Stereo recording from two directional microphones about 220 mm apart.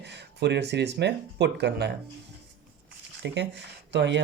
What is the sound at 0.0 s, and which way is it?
Speech, 50° right (ahead or behind).